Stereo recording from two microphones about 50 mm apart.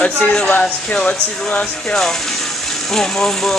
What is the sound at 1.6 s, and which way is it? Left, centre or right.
Speech, centre.